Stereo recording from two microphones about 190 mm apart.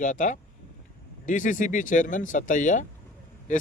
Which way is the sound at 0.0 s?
40° left (ahead or behind).